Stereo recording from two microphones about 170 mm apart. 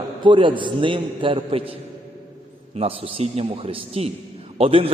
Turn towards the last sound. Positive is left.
turn(degrees=-35)  # may be behind; listen again after turning